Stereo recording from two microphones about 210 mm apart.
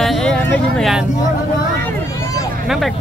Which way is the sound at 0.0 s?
Centre (ahead or behind).